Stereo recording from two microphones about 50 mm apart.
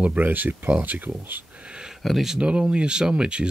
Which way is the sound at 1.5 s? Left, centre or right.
Right.